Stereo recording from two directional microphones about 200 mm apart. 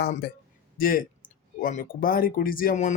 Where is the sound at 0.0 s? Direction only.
45° left (ahead or behind).